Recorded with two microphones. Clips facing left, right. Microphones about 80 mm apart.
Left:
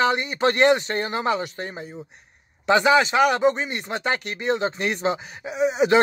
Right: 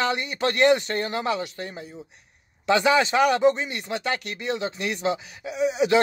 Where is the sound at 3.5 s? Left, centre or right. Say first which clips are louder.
Left 1 dB; left.